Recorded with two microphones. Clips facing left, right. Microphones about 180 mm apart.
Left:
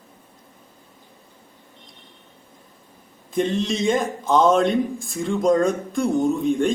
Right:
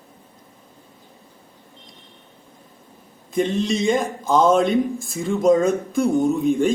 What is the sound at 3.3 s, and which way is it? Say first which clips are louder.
A man's voice: right 1 dB; centre (ahead or behind).